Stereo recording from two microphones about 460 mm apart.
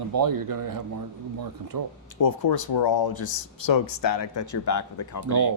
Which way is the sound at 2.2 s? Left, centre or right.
Left.